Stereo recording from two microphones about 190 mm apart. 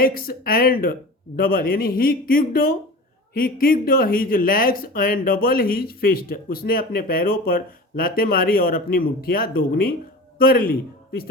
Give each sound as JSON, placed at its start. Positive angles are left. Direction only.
{"t": 0.0, "sound": "a man's voice", "side_deg": 50}